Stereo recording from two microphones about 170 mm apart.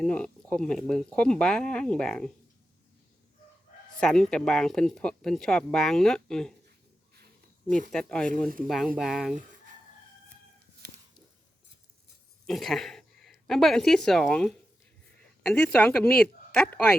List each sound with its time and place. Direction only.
0.0 s speech: 5° left (ahead or behind)
3.9 s speech: 5° left (ahead or behind)
7.7 s speech: 50° right (ahead or behind)
7.9 s speech: 5° left (ahead or behind)
12.5 s a sound: centre (ahead or behind)
13.5 s a woman's voice: centre (ahead or behind)